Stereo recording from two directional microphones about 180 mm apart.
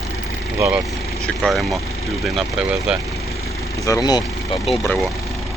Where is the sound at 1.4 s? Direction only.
Centre (ahead or behind).